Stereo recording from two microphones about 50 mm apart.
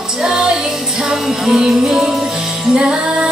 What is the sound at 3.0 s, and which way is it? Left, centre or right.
Music, right.